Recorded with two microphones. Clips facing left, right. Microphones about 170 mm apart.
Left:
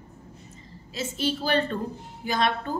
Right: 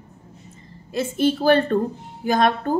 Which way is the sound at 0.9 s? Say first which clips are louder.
Right 8 dB; 55° right (ahead or behind).